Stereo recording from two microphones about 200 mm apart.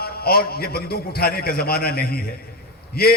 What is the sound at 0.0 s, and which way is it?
A man's voice, 50° left (ahead or behind).